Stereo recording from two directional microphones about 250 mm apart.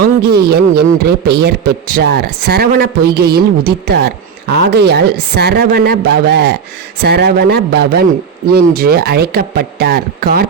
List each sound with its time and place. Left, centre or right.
0.0 s a man's voice: right